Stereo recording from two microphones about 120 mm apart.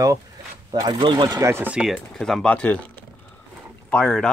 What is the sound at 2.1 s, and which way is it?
Speech, 5° left (ahead or behind).